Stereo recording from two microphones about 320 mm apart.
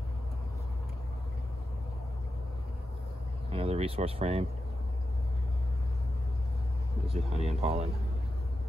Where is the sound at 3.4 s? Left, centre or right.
Centre.